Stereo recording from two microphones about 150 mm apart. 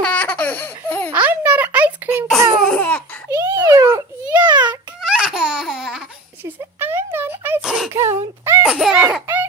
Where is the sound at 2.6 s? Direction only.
10° left (ahead or behind).